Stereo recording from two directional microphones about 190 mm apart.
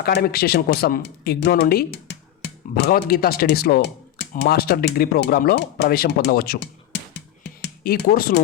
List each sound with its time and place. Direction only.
0.0 s speech: 55° left (ahead or behind)